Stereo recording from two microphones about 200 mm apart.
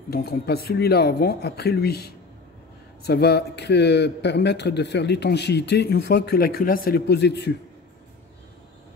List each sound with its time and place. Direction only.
0.1 s speech: 50° left (ahead or behind)